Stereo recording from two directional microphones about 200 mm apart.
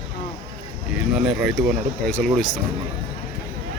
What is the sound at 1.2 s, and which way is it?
Speech, 5° right (ahead or behind).